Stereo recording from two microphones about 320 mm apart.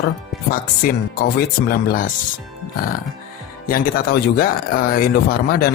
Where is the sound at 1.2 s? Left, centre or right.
Left.